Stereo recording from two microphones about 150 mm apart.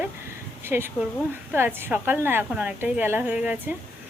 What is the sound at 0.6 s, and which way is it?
Speech, 15° right (ahead or behind).